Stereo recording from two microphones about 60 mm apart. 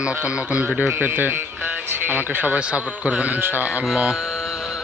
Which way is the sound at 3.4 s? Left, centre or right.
Right.